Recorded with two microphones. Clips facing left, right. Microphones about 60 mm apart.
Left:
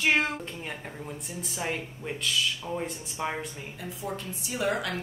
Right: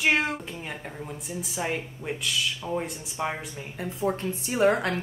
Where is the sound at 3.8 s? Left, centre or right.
Right.